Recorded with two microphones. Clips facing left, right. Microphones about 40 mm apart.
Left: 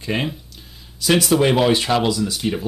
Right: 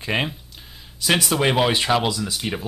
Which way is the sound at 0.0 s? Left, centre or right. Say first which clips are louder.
Even; centre.